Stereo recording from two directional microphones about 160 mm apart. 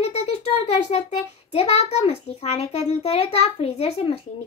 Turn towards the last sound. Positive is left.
turn(degrees=40)  # may be behind; listen again after turning